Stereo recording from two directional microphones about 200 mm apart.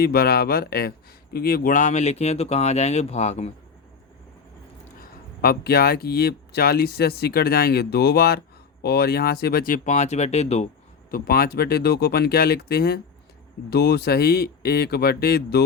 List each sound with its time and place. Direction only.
0.0 s speech: 50° left (ahead or behind); by 3.5 s 35° left (ahead or behind)
5.4 s speech: 50° left (ahead or behind); by 10.7 s 30° left (ahead or behind)
11.1 s speech: 50° left (ahead or behind)